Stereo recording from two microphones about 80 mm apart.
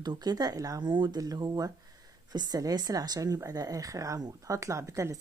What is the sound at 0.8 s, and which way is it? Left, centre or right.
Speech, right.